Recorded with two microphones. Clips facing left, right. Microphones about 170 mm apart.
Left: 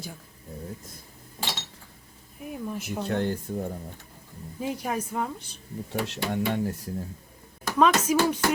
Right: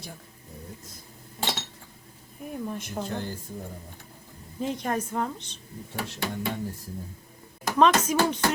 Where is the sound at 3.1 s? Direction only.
65° left (ahead or behind).